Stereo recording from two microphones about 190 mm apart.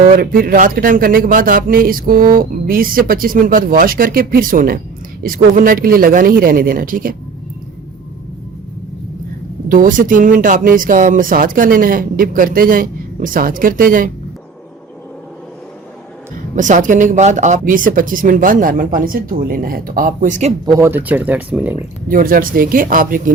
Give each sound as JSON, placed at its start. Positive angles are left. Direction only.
{"t": 0.2, "sound": "speech", "side_deg": -50}
{"t": 9.6, "sound": "speech", "side_deg": -45}
{"t": 16.6, "sound": "speech", "side_deg": -40}
{"t": 20.7, "sound": "speech", "side_deg": -15}
{"t": 22.1, "sound": "speech", "side_deg": -50}